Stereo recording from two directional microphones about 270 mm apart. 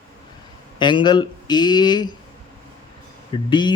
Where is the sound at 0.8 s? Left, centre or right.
Centre.